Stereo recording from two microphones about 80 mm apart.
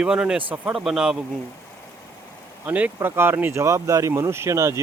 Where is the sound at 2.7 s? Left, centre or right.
Centre; by 4.8 s right.